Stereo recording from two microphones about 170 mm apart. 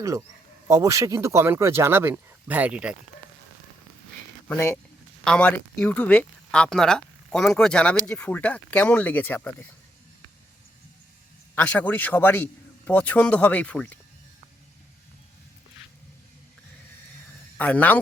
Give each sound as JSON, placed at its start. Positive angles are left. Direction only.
{"t": 0.7, "sound": "speech", "side_deg": -15}
{"t": 4.4, "sound": "speech", "side_deg": 15}
{"t": 11.5, "sound": "speech", "side_deg": 10}
{"t": 17.6, "sound": "speech", "side_deg": 10}